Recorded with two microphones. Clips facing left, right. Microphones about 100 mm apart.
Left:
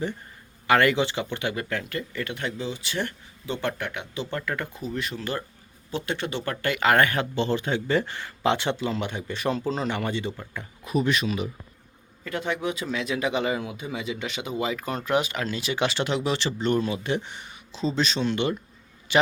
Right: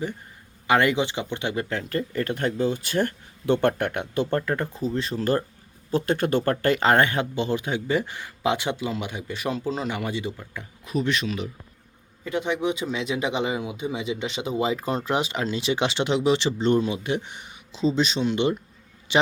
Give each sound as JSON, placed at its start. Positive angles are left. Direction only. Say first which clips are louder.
{"t": 0.7, "sound": "speech", "louder": "even", "side_deg": -20}
{"t": 3.4, "sound": "speech", "louder": "right 8 dB", "side_deg": -55}
{"t": 12.2, "sound": "a man's voice", "louder": "right 3 dB", "side_deg": -20}